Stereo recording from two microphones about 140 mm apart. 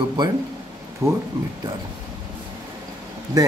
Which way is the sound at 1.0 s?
20° right (ahead or behind).